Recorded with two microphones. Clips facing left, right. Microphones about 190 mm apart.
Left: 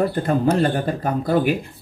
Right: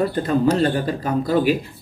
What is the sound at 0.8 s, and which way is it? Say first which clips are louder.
Speech: even; 55° left (ahead or behind).